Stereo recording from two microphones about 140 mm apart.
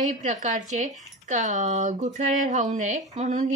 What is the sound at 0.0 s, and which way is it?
Speech, 60° right (ahead or behind).